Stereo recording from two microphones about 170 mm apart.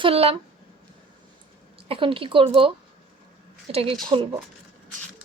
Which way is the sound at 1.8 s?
30° right (ahead or behind).